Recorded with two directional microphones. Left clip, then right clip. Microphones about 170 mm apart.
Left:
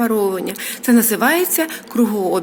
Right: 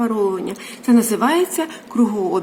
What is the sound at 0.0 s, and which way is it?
A woman's voice, 10° left (ahead or behind).